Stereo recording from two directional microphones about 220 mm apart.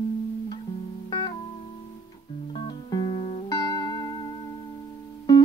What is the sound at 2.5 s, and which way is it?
Music, 20° left (ahead or behind).